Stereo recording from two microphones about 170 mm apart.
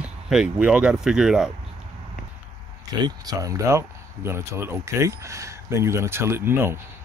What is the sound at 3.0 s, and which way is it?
Speech, 20° right (ahead or behind).